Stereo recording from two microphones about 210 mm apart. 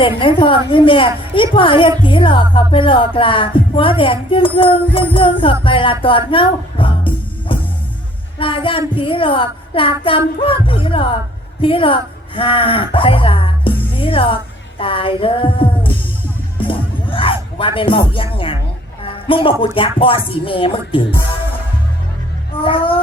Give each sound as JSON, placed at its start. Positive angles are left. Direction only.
{"t": 0.0, "sound": "speech", "side_deg": 25}
{"t": 8.4, "sound": "music", "side_deg": 25}
{"t": 9.0, "sound": "speech", "side_deg": 25}
{"t": 16.6, "sound": "music", "side_deg": 25}
{"t": 19.0, "sound": "speech", "side_deg": 25}
{"t": 22.6, "sound": "speech", "side_deg": 25}